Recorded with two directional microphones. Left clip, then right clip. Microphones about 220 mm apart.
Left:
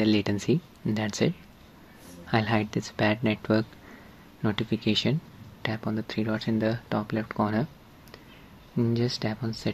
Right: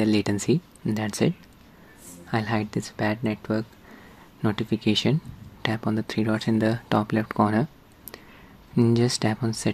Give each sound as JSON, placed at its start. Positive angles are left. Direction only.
{"t": 0.0, "sound": "speech", "side_deg": -10}
{"t": 8.7, "sound": "speech", "side_deg": -15}